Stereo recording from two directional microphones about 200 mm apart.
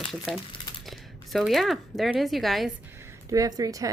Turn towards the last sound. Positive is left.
turn(degrees=-15)  # may be behind; listen again after turning